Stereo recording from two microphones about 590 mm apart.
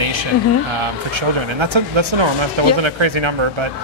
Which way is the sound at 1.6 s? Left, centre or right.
Right.